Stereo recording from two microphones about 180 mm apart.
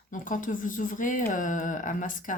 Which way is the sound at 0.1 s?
45° left (ahead or behind).